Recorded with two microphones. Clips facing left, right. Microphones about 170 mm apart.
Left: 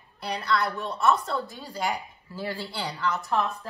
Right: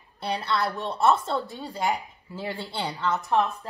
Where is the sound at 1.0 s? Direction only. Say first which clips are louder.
Right 2 dB; 30° right (ahead or behind).